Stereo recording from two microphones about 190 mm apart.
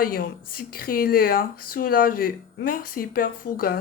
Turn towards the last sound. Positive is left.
turn(degrees=50)  # may be behind; listen again after turning